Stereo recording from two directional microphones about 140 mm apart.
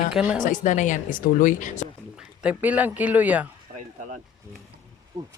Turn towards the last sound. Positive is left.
turn(degrees=-10)  # may be behind; listen again after turning